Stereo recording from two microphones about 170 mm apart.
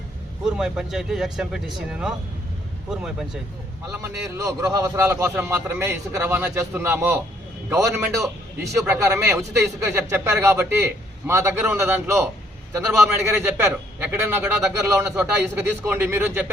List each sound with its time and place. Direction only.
0.4 s speech: 5° right (ahead or behind)
3.9 s a man's voice: 20° right (ahead or behind)